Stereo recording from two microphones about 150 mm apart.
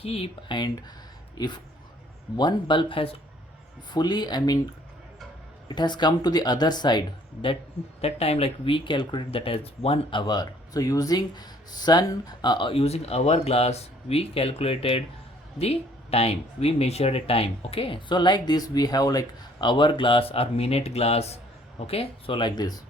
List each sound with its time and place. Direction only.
0.0 s speech: 40° left (ahead or behind)
2.3 s speech: 30° left (ahead or behind)
8.0 s speech: 45° left (ahead or behind); by 22.8 s 25° left (ahead or behind)